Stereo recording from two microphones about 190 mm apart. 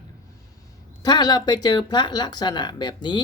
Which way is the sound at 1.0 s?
20° left (ahead or behind).